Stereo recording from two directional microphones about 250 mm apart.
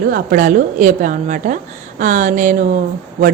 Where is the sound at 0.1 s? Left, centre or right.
Right.